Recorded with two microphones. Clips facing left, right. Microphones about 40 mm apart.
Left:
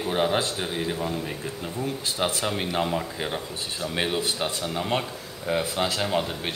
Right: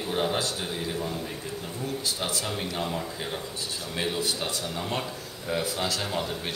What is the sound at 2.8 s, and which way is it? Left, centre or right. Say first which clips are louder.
Speech: left 4 dB; left.